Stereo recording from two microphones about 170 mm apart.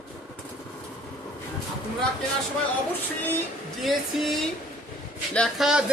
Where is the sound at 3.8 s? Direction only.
Centre (ahead or behind).